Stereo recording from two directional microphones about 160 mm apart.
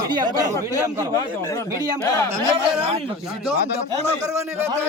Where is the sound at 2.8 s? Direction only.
40° right (ahead or behind).